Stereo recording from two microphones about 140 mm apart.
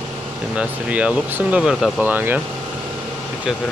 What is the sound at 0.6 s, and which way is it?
Speech, 10° right (ahead or behind).